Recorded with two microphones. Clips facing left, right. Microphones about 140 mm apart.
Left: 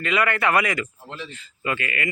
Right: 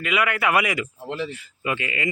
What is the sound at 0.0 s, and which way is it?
Speech, 5° right (ahead or behind).